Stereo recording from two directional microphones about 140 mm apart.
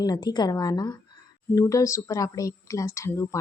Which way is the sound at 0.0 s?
30° left (ahead or behind).